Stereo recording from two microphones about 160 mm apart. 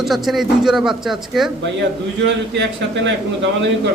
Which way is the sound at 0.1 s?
Centre (ahead or behind).